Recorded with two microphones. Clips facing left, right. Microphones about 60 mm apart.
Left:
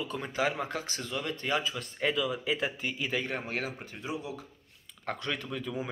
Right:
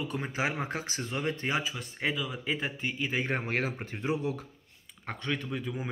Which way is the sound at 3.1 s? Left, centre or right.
Right.